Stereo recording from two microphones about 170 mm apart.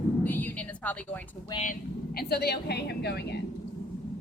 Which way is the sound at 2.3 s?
70° left (ahead or behind).